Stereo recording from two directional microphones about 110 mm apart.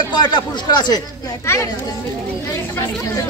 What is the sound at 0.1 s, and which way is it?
Speech, 40° left (ahead or behind).